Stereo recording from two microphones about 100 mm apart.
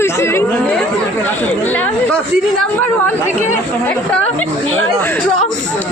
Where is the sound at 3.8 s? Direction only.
15° left (ahead or behind).